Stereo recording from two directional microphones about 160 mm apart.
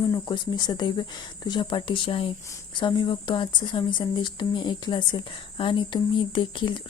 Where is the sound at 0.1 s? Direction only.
25° left (ahead or behind).